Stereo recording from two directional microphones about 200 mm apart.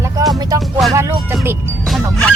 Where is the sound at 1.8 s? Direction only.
Centre (ahead or behind).